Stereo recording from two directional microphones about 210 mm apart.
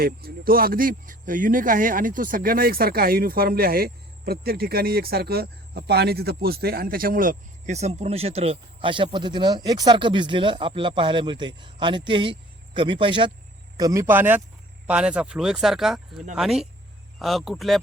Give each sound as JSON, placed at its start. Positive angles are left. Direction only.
{"t": 0.0, "sound": "speech", "side_deg": -45}